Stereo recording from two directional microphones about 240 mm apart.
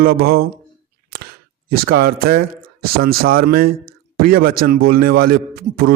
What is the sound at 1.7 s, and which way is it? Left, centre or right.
Speech, right.